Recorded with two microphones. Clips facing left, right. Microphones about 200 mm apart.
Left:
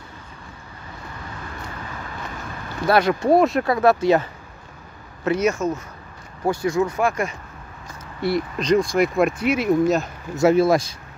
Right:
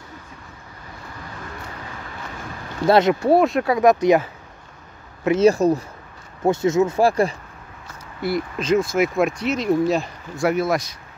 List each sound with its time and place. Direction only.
2.9 s speech: 20° right (ahead or behind)
3.3 s speech: centre (ahead or behind)
3.6 s speech: 15° right (ahead or behind)
5.4 s speech: 35° right (ahead or behind)
6.4 s speech: 25° right (ahead or behind)
7.0 s speech: 35° right (ahead or behind)
8.2 s speech: centre (ahead or behind)
10.3 s speech: 25° left (ahead or behind)